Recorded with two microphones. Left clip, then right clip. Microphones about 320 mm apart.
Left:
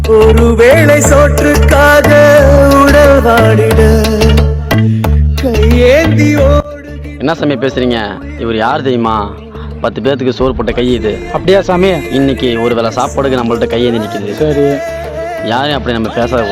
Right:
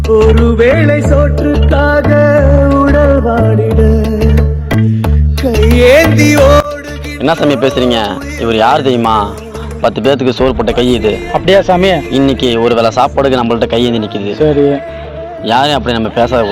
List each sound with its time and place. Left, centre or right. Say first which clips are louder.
0.2 s music: left 3 dB; centre; by 1.6 s left
1.6 s music: left 5 dB; left; by 5.1 s centre
5.4 s music: right 1 dB; centre
7.2 s a man's voice: right 3 dB; centre
11.4 s speech: right 1 dB; centre
12.1 s a man's voice: right 1 dB; centre